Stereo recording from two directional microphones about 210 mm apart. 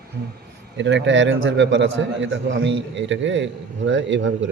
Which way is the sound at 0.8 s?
55° right (ahead or behind).